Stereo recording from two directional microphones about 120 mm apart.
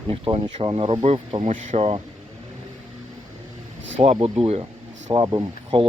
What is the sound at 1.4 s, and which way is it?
Speech, 90° right.